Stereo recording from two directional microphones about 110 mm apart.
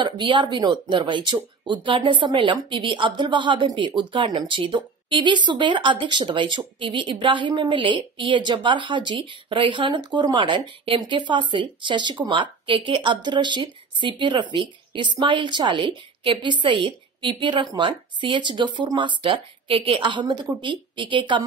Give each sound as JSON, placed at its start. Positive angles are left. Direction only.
{"t": 0.0, "sound": "speech", "side_deg": -45}